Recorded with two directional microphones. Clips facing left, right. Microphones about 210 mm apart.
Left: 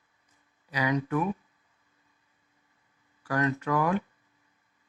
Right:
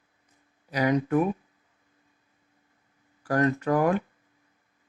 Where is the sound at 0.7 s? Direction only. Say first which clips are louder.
Right 4 dB; 45° right (ahead or behind).